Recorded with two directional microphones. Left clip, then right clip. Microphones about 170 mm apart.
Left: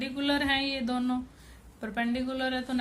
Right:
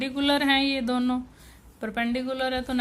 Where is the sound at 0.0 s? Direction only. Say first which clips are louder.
Right 5 dB; 35° right (ahead or behind).